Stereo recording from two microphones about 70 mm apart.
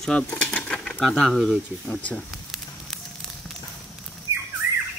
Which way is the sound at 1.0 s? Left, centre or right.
Centre.